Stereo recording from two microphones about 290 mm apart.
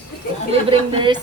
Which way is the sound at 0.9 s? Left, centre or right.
Centre.